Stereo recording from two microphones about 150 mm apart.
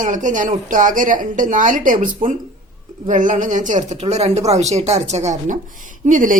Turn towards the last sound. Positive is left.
turn(degrees=-60)  # may be behind; listen again after turning